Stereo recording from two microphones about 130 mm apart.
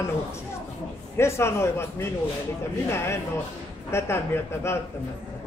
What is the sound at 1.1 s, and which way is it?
Speech, 20° left (ahead or behind).